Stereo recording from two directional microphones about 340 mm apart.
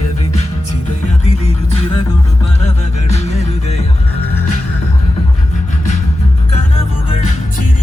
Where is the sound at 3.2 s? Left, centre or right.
Centre.